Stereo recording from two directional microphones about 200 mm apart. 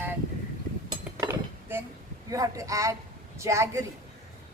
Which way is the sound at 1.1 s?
10° right (ahead or behind).